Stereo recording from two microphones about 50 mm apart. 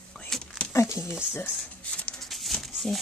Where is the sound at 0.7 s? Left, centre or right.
Left.